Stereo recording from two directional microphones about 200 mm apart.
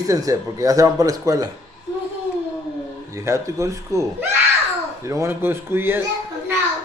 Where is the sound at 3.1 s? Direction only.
15° right (ahead or behind).